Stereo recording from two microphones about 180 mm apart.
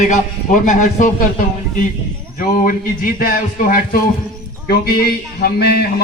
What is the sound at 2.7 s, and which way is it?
A man's voice, 50° left (ahead or behind).